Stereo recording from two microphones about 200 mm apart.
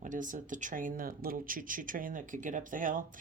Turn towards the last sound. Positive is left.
turn(degrees=-40)  # may be behind; listen again after turning